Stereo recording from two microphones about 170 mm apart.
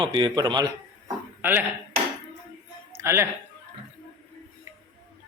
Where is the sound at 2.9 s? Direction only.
15° right (ahead or behind).